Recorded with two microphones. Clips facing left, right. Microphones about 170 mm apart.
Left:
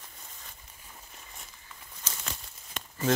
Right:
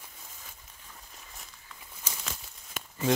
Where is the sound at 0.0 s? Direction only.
5° right (ahead or behind).